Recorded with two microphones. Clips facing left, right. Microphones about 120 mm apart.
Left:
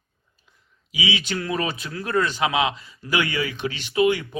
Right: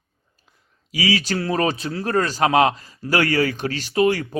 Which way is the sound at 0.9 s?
40° right (ahead or behind).